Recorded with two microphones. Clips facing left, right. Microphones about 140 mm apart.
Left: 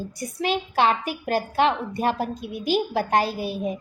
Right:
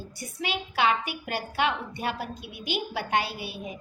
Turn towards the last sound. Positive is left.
turn(degrees=40)  # may be behind; listen again after turning